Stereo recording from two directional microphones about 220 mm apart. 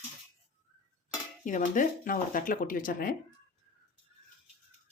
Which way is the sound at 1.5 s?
35° left (ahead or behind).